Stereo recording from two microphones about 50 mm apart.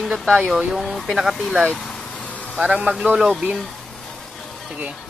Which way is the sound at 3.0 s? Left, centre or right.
Centre.